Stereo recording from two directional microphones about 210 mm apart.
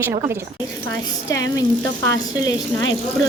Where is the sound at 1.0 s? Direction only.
15° left (ahead or behind).